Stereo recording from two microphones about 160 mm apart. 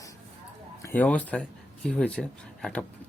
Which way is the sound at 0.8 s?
15° left (ahead or behind).